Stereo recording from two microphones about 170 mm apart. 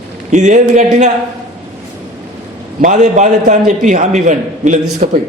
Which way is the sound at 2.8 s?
45° right (ahead or behind).